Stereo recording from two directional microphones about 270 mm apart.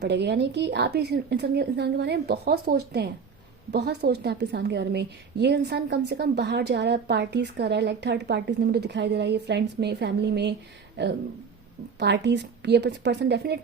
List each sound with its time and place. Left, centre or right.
0.0 s a woman's voice: right